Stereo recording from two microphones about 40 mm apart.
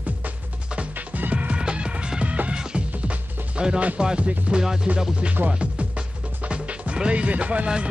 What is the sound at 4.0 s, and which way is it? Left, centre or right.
Speech, right.